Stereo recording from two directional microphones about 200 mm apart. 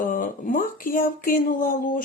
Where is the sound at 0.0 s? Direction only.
40° left (ahead or behind).